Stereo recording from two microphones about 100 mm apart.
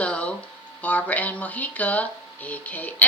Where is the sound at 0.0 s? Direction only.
10° left (ahead or behind).